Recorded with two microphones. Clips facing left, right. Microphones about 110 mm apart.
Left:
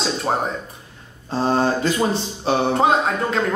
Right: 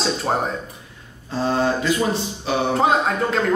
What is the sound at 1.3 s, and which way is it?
Speech, 30° left (ahead or behind).